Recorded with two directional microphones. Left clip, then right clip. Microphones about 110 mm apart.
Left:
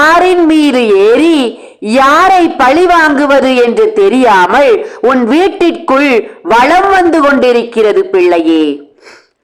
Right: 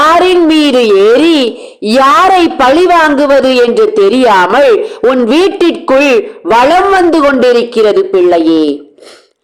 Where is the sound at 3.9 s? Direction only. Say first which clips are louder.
Even; 20° right (ahead or behind).